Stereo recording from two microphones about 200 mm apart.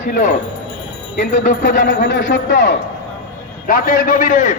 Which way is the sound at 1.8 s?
65° left (ahead or behind).